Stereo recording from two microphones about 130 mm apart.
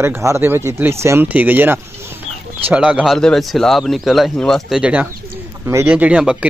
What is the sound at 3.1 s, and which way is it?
Speech, 5° left (ahead or behind).